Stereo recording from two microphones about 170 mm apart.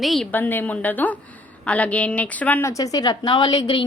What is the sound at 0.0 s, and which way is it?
A woman's voice, centre (ahead or behind).